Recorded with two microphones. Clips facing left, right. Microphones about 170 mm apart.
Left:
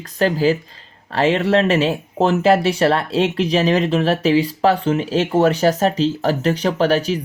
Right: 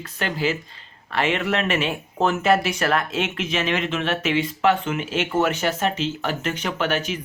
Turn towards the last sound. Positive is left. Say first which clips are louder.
# left 7 dB
turn(degrees=35)  # may be behind; listen again after turning